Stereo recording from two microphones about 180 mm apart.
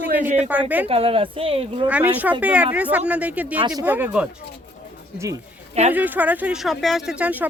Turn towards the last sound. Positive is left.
turn(degrees=-10)  # may be behind; listen again after turning